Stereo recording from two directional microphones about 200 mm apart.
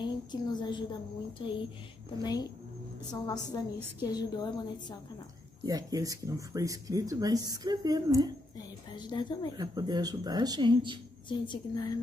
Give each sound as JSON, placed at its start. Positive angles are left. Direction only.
{"t": 0.0, "sound": "a woman's voice", "side_deg": 20}
{"t": 5.7, "sound": "speech", "side_deg": -20}
{"t": 8.5, "sound": "a woman's voice", "side_deg": 20}
{"t": 9.6, "sound": "speech", "side_deg": -20}
{"t": 11.2, "sound": "a woman's voice", "side_deg": 25}